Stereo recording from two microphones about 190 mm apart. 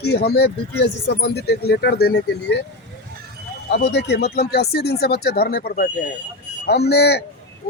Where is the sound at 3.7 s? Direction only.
65° left (ahead or behind).